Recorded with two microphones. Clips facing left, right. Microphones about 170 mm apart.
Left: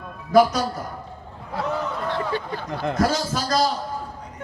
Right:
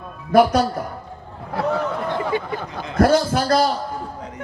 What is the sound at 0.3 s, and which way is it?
Speech, 55° right (ahead or behind).